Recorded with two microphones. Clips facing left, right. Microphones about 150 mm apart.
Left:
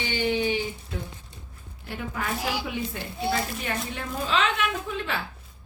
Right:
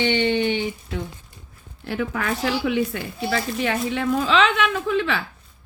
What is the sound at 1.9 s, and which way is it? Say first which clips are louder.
Speech: right 6 dB; 90° right.